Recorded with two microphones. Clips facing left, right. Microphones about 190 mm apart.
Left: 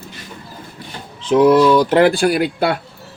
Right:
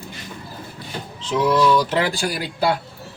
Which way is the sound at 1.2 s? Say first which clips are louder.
Left 7 dB; 55° left (ahead or behind).